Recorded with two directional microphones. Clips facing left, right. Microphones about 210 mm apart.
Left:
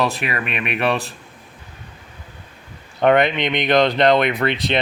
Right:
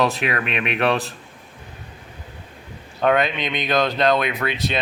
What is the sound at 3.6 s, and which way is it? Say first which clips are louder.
Speech: left 4 dB; 70° left (ahead or behind).